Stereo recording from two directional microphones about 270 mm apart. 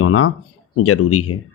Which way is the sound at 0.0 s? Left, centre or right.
Left.